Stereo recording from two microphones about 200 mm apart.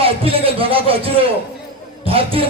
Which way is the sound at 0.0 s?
30° right (ahead or behind).